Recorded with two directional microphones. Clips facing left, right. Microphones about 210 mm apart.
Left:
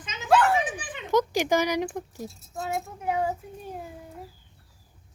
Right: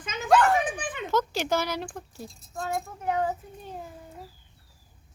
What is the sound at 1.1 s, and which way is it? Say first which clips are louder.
Speech: left 4 dB; 15° left (ahead or behind).